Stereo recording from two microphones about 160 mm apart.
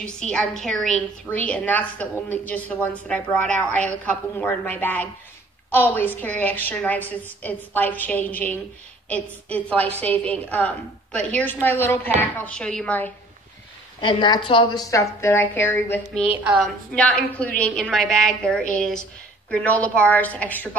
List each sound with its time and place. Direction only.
0.0 s a woman's voice: 5° left (ahead or behind)
14.0 s a woman's voice: 30° left (ahead or behind); by 20.7 s 10° left (ahead or behind)